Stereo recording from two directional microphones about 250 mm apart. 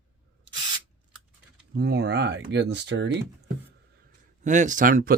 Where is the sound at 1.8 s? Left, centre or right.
Right.